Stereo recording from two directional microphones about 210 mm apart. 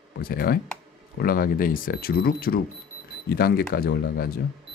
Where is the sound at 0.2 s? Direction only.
45° left (ahead or behind).